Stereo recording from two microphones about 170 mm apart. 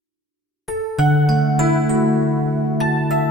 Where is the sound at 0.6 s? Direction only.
Centre (ahead or behind).